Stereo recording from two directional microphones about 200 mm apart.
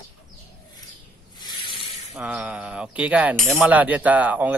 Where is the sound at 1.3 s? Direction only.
20° left (ahead or behind).